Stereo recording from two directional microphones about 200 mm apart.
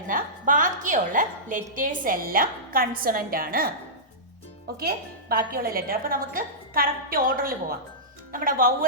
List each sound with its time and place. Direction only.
0.1 s a woman's voice: 40° right (ahead or behind)
4.8 s a woman's voice: 50° right (ahead or behind)